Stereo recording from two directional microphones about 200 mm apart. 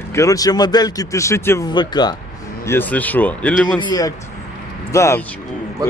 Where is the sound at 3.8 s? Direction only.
20° left (ahead or behind).